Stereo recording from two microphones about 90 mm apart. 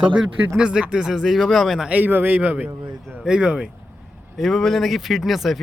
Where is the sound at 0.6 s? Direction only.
10° right (ahead or behind).